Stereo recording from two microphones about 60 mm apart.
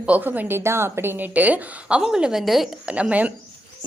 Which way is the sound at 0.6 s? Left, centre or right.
Right.